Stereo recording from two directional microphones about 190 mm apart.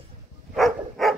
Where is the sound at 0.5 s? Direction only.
Centre (ahead or behind).